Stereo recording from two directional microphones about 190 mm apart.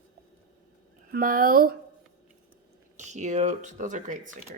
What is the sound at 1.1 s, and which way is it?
Speech, 50° right (ahead or behind).